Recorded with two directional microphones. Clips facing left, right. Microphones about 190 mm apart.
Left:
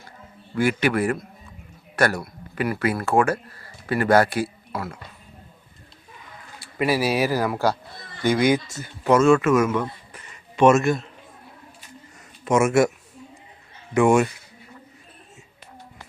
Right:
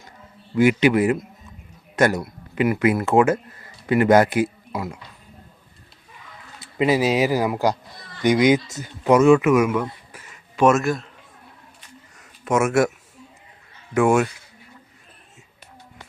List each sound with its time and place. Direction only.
0.5 s a man's voice: 20° right (ahead or behind)
6.6 s speech: 20° right (ahead or behind); by 11.0 s centre (ahead or behind)
12.5 s a man's voice: centre (ahead or behind)
13.9 s a man's voice: centre (ahead or behind)